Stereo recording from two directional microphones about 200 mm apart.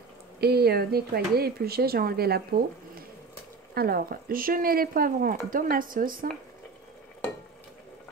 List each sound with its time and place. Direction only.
0.4 s speech: 50° right (ahead or behind)